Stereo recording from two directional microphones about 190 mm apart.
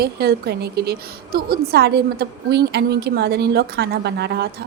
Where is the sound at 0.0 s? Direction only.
55° right (ahead or behind).